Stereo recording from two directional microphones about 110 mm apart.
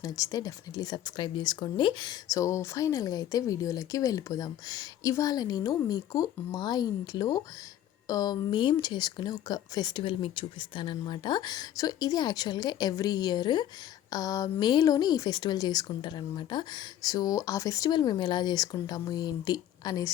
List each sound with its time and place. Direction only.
0.0 s speech: 35° left (ahead or behind)